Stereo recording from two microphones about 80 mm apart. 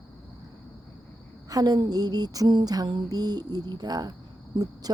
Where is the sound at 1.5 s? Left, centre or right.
Right.